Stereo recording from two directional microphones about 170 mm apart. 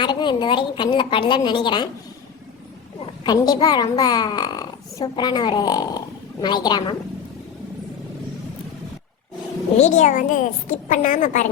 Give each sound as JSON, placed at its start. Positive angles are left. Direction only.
{"t": 0.0, "sound": "a child's voice", "side_deg": 25}
{"t": 3.3, "sound": "a child's voice", "side_deg": 25}
{"t": 9.7, "sound": "a woman's voice", "side_deg": 45}